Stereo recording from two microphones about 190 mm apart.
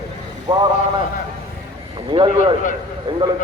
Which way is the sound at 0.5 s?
25° right (ahead or behind).